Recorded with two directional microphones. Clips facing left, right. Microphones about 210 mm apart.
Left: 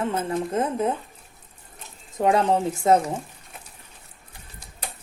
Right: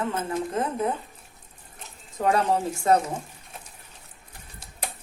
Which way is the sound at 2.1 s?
20° left (ahead or behind).